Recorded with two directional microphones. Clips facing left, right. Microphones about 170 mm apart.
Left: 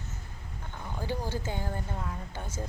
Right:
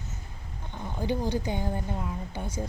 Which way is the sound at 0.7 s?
20° right (ahead or behind).